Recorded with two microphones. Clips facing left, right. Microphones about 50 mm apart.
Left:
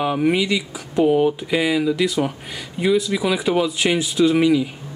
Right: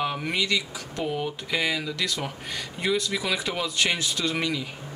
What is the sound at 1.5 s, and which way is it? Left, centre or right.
Speech, centre.